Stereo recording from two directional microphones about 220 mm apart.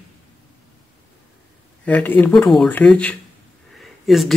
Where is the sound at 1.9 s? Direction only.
5° left (ahead or behind).